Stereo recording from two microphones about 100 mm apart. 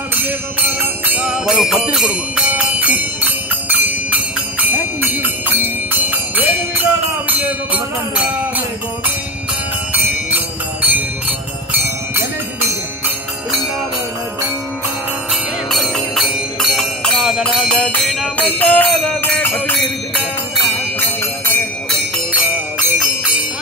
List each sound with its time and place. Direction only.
0.7 s jingle bell: 20° right (ahead or behind)
4.6 s music: 20° right (ahead or behind)
15.7 s music: centre (ahead or behind)
18.6 s music: 15° left (ahead or behind)